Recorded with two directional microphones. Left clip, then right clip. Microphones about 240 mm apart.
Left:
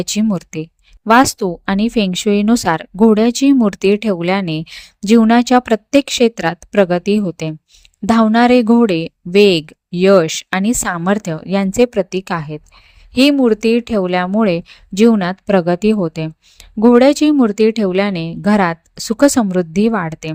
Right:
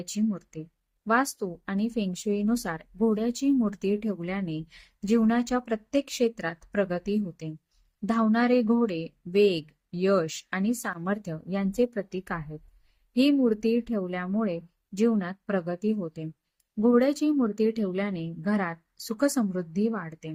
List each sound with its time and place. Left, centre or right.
0.0 s speech: left